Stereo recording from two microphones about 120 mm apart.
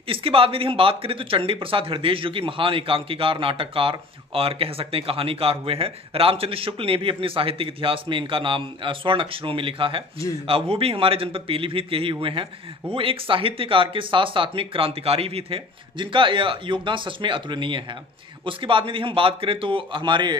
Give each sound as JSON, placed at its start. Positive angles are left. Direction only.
{"t": 0.1, "sound": "speech", "side_deg": -50}